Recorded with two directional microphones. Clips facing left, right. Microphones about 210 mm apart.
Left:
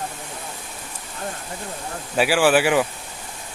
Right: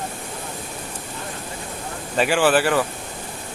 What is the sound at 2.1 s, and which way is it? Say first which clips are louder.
Speech: left 1 dB; 5° left (ahead or behind).